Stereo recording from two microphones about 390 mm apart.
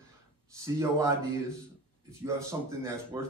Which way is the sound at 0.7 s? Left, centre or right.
Centre.